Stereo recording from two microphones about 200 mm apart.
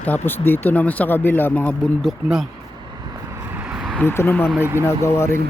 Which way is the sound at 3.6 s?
5° right (ahead or behind).